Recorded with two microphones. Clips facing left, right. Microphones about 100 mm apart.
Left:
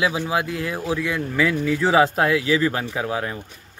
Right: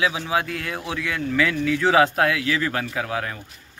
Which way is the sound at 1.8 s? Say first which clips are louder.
Even; 5° left (ahead or behind).